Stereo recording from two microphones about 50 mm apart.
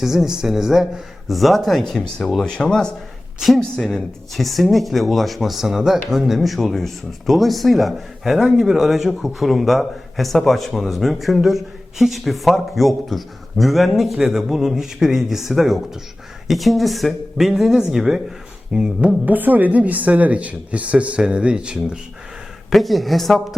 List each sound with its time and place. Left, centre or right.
0.0 s speech: centre
1.8 s speech: centre
19.2 s speech: right; by 21.9 s centre
22.7 s speech: centre